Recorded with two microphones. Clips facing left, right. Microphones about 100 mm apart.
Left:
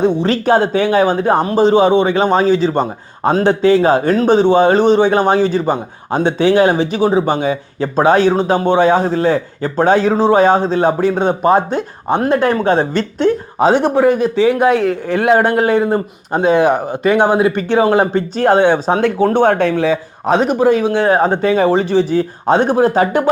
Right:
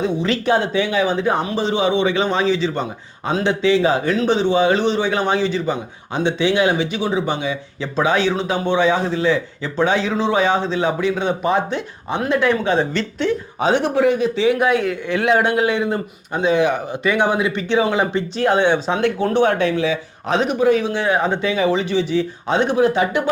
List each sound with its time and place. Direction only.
0.2 s speech: 40° left (ahead or behind)